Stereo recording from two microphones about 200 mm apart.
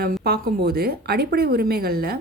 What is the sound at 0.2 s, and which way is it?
Speech, 50° right (ahead or behind).